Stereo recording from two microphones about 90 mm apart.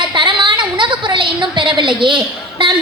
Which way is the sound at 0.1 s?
60° right (ahead or behind).